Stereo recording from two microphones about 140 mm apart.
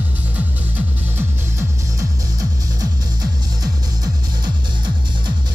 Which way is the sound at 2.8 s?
25° right (ahead or behind).